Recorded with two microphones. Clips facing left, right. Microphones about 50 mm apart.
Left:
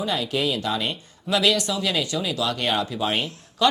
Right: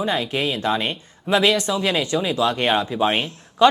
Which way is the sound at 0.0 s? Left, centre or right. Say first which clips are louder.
Right 2 dB; right.